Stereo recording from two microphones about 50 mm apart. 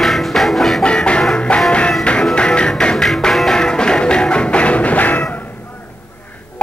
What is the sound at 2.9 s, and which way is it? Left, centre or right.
Music, centre.